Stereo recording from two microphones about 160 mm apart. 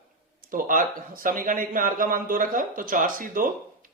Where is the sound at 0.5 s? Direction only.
60° right (ahead or behind).